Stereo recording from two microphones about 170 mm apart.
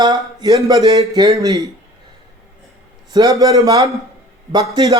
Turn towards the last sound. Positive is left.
turn(degrees=-25)  # may be behind; listen again after turning